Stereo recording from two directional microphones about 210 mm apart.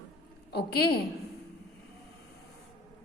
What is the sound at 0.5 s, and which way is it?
Speech, 50° left (ahead or behind).